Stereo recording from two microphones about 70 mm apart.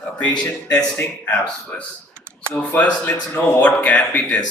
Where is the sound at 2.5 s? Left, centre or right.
Left.